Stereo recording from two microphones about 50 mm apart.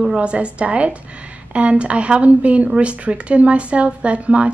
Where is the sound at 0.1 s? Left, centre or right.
Right.